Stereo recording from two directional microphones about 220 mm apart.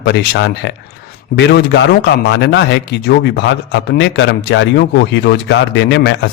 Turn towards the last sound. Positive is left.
turn(degrees=50)  # may be behind; listen again after turning